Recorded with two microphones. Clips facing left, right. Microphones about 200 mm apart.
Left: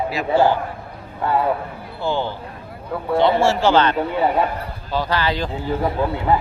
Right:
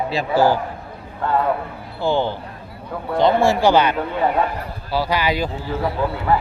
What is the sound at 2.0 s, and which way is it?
Speech, 15° right (ahead or behind).